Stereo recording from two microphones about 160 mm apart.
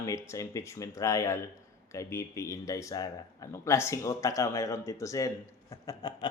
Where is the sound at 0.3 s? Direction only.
20° left (ahead or behind).